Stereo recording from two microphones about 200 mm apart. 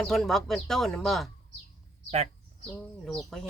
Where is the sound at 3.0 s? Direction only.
Centre (ahead or behind).